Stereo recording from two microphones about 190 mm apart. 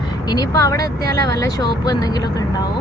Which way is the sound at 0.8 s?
55° right (ahead or behind).